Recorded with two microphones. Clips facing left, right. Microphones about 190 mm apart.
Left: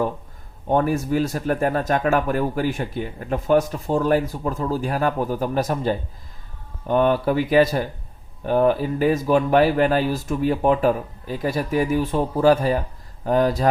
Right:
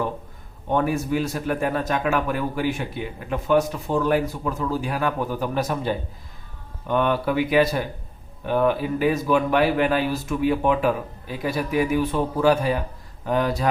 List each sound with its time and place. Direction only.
0.7 s a man's voice: 40° left (ahead or behind)